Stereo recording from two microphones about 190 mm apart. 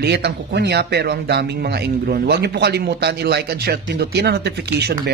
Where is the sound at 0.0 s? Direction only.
60° right (ahead or behind).